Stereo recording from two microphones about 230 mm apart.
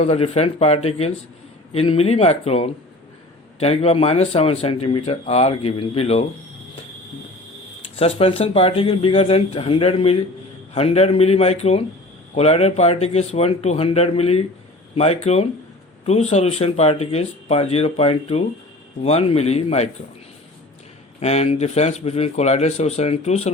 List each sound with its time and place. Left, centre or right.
0.0 s speech: left
7.9 s speech: left
21.2 s speech: left